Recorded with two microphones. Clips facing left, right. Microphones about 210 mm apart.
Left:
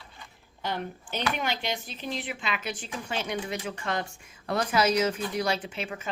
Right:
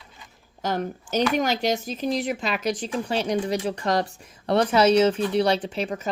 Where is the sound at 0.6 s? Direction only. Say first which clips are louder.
Right 6 dB; 40° right (ahead or behind).